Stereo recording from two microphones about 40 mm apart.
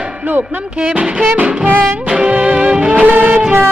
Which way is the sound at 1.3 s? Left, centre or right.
Right.